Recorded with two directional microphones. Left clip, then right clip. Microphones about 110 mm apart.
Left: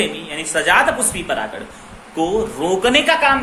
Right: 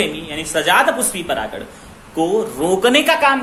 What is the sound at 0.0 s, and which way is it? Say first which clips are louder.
Speech: right 1 dB; 40° right (ahead or behind).